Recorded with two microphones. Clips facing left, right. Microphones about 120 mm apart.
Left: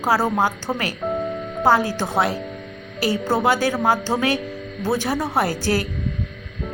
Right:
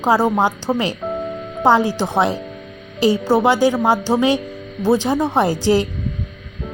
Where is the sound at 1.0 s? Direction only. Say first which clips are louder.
Even; centre (ahead or behind).